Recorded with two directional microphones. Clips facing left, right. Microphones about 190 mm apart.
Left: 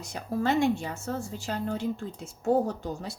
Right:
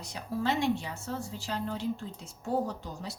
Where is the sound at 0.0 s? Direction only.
50° left (ahead or behind).